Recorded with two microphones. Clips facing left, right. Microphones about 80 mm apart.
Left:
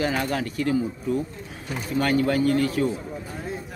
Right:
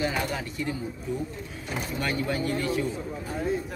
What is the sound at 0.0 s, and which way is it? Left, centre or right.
Speech, left.